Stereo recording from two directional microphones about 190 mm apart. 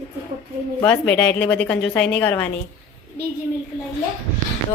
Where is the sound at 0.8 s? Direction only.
10° left (ahead or behind).